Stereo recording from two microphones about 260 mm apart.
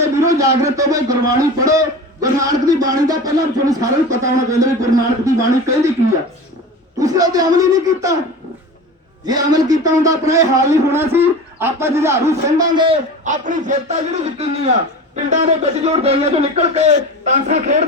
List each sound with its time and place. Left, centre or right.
0.0 s a man's voice: centre
7.0 s a man's voice: centre
9.2 s a man's voice: centre